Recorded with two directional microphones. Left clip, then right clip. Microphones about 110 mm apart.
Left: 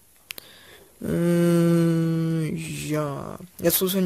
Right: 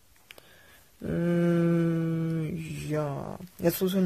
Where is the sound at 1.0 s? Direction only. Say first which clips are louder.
Left 5 dB; 30° left (ahead or behind).